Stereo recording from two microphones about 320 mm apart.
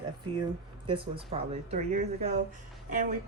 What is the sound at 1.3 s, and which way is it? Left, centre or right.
Speech, right.